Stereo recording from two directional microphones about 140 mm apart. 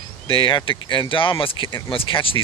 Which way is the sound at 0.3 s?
40° left (ahead or behind).